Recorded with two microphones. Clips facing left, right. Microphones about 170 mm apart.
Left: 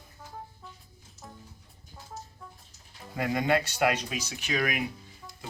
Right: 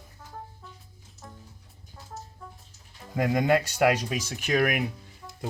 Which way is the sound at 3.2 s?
40° right (ahead or behind).